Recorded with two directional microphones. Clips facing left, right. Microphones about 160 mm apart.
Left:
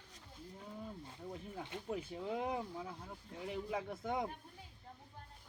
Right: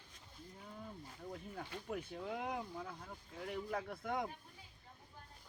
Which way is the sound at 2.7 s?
10° left (ahead or behind).